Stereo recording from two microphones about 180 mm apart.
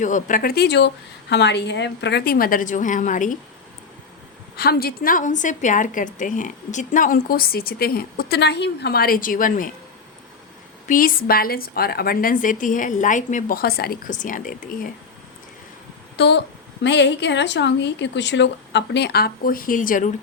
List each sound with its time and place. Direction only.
0.0 s a woman's voice: 45° left (ahead or behind)
4.5 s a woman's voice: 60° left (ahead or behind)
10.8 s a woman's voice: 50° left (ahead or behind)
16.1 s a woman's voice: 70° left (ahead or behind); by 20.1 s 50° left (ahead or behind)